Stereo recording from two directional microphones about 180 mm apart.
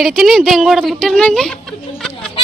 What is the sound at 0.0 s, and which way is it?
Speech, centre (ahead or behind).